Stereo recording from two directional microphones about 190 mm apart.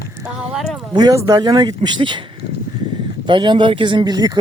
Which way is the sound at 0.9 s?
20° right (ahead or behind).